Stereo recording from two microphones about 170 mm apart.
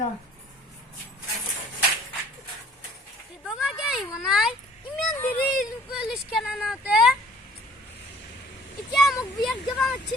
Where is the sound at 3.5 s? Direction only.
Centre (ahead or behind).